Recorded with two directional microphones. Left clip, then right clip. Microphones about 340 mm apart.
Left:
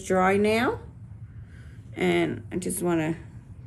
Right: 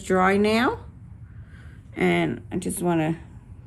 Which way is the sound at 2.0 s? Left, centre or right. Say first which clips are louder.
Right 2 dB; centre.